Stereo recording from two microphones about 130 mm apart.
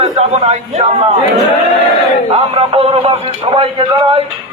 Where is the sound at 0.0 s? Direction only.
55° right (ahead or behind).